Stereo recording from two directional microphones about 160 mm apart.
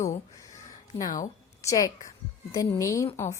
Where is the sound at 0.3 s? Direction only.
20° left (ahead or behind).